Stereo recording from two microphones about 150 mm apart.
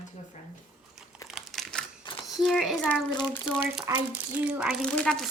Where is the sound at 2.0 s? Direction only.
30° left (ahead or behind).